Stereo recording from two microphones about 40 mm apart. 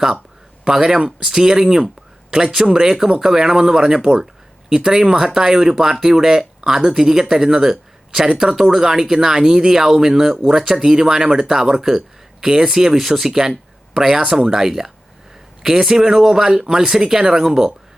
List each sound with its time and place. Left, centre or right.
0.6 s speech: centre
2.9 s speech: centre